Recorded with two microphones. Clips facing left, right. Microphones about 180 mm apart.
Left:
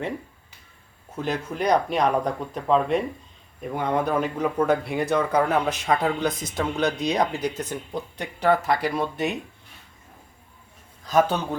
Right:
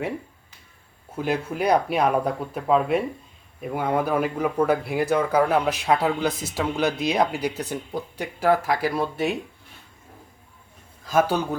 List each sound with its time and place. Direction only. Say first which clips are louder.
1.1 s speech: right 2 dB; 10° right (ahead or behind)
11.0 s a man's voice: even; 5° right (ahead or behind)